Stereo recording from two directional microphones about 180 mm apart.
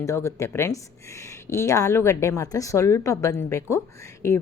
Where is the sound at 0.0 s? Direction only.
15° left (ahead or behind).